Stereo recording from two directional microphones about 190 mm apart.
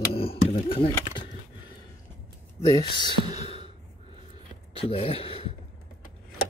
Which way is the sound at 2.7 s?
20° left (ahead or behind).